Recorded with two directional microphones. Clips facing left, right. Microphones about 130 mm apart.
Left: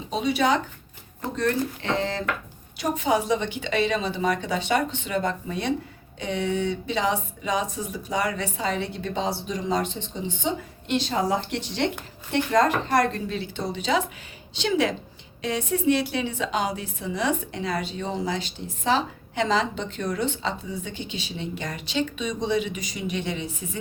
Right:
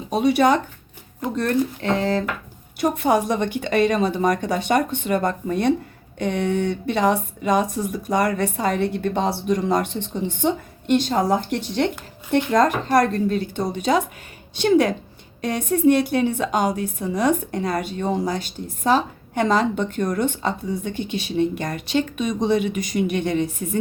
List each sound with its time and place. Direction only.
0.1 s a woman's voice: 55° right (ahead or behind)